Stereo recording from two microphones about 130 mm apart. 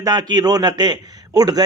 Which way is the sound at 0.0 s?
30° right (ahead or behind).